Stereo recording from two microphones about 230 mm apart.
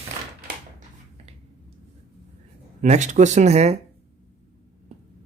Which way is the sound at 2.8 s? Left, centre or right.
Right.